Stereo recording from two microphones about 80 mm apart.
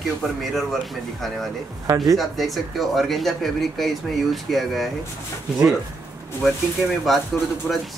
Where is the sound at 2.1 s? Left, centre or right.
Centre.